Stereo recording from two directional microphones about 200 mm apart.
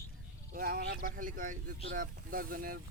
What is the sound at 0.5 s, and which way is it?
Speech, 45° right (ahead or behind).